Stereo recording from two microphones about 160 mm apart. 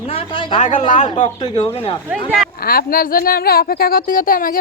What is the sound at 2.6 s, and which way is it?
Speech, 65° left (ahead or behind).